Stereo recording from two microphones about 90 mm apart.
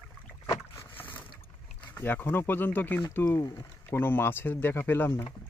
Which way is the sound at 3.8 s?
25° left (ahead or behind).